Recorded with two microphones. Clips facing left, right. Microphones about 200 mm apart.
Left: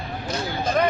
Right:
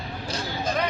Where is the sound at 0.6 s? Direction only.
50° left (ahead or behind).